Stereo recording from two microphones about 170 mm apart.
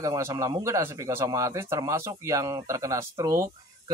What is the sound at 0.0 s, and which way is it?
A man's voice, 20° right (ahead or behind).